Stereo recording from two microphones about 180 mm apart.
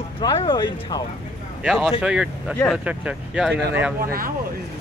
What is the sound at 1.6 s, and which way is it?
Speech, centre (ahead or behind).